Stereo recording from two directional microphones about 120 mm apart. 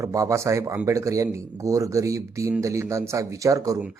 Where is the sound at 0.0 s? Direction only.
25° right (ahead or behind).